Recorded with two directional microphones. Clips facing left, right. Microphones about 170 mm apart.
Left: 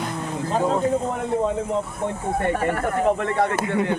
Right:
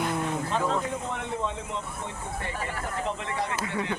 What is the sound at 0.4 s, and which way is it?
Speech, 35° left (ahead or behind).